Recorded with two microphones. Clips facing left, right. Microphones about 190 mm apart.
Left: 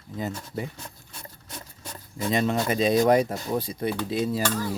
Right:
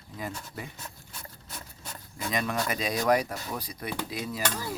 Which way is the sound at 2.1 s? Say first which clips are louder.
Left 6 dB; 25° left (ahead or behind).